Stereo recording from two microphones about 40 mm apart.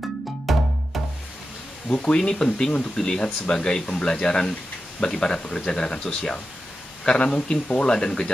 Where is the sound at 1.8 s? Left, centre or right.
Left.